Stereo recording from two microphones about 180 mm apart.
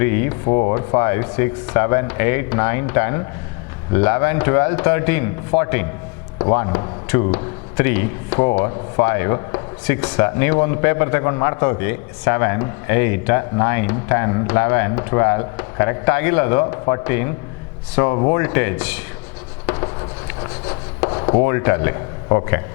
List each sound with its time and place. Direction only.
0.0 s rub: 15° left (ahead or behind)
0.4 s a man's voice: 25° left (ahead or behind)
19.6 s chopping: 20° left (ahead or behind)
21.4 s a man's voice: 15° left (ahead or behind)